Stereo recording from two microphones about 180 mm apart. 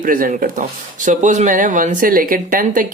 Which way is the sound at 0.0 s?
50° right (ahead or behind).